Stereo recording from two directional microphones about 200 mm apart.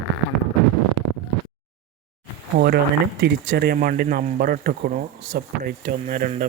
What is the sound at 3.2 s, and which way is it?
Speech, 55° right (ahead or behind).